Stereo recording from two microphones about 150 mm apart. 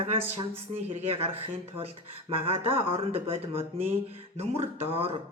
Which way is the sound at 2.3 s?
40° right (ahead or behind).